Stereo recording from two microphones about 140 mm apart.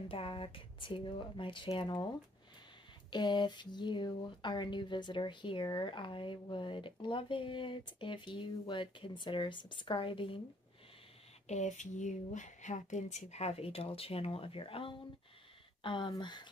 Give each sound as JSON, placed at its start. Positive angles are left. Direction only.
{"t": 0.1, "sound": "speech", "side_deg": 40}
{"t": 3.1, "sound": "speech", "side_deg": 35}
{"t": 11.4, "sound": "speech", "side_deg": 55}